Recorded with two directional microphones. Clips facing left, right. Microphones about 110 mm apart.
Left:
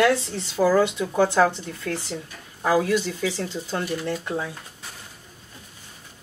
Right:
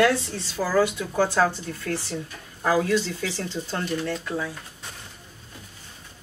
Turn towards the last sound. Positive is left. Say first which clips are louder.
# left 1 dB
turn(degrees=20)  # may be behind; listen again after turning